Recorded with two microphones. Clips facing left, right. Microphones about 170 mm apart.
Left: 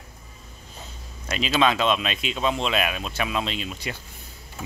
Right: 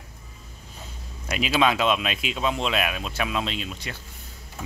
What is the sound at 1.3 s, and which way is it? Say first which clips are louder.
Speech: even; 10° right (ahead or behind).